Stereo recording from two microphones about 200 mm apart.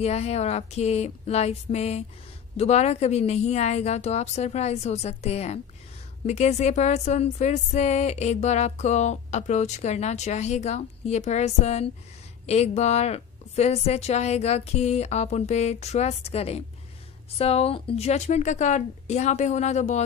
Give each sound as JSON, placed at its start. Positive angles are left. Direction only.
{"t": 0.0, "sound": "speech", "side_deg": 30}